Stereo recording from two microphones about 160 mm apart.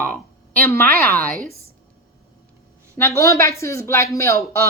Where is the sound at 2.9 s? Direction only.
15° left (ahead or behind).